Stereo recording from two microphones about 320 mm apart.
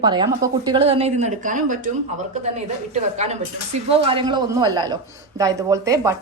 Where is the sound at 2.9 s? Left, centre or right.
Right.